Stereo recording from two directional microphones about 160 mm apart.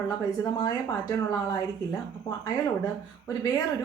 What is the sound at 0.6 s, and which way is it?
Speech, 25° left (ahead or behind).